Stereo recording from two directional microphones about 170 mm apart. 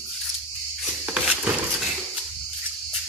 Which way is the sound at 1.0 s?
5° right (ahead or behind).